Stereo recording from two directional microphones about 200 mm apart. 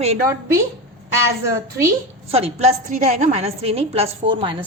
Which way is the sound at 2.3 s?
30° right (ahead or behind).